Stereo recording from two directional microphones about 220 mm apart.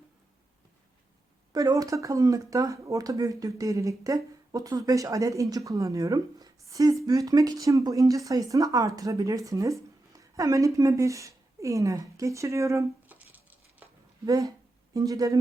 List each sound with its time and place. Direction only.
1.5 s speech: 15° right (ahead or behind)
13.3 s a sound: 5° right (ahead or behind)
14.3 s speech: 15° right (ahead or behind)